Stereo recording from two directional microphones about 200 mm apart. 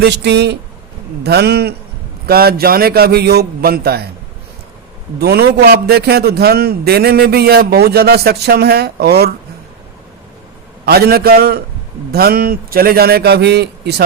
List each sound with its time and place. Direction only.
0.0 s a man's voice: 55° right (ahead or behind)
5.2 s a man's voice: 55° right (ahead or behind)
10.8 s a man's voice: 50° right (ahead or behind)